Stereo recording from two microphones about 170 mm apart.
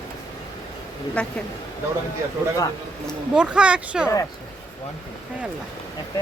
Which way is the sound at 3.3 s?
5° right (ahead or behind).